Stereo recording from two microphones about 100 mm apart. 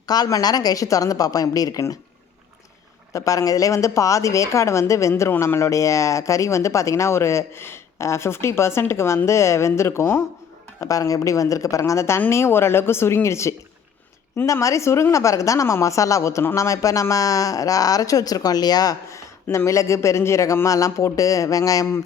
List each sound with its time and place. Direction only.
0.0 s a woman's voice: 40° left (ahead or behind)
3.1 s a woman's voice: 35° left (ahead or behind)